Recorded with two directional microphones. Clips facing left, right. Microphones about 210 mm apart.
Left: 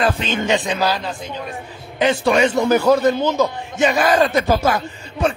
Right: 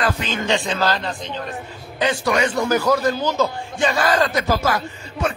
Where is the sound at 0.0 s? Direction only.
25° left (ahead or behind); by 1.1 s 10° left (ahead or behind).